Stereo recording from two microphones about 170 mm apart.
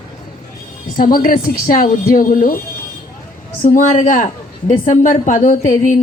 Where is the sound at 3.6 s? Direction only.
50° left (ahead or behind).